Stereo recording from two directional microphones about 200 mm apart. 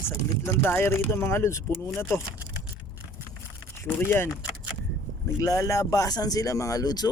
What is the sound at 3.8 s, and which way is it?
Speech, 10° left (ahead or behind).